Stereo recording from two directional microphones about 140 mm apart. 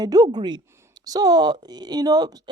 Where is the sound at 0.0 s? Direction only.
30° right (ahead or behind).